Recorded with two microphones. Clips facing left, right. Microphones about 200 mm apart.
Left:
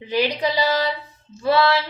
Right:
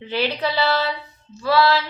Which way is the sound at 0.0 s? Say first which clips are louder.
Left 2 dB; 15° left (ahead or behind).